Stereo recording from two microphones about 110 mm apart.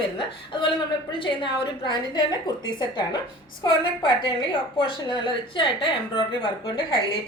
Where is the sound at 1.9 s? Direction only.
40° left (ahead or behind).